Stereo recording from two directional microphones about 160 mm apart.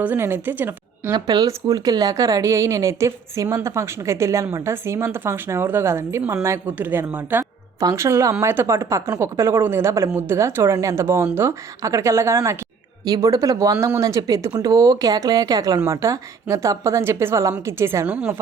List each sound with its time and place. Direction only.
0.0 s a woman's voice: 10° right (ahead or behind)
1.1 s speech: 25° right (ahead or behind); by 18.3 s 10° right (ahead or behind)